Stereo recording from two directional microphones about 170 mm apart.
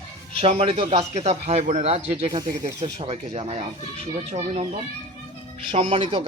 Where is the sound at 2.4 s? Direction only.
20° right (ahead or behind).